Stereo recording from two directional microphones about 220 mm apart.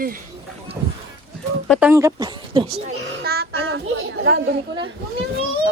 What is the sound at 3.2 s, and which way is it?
Child singing, 45° right (ahead or behind).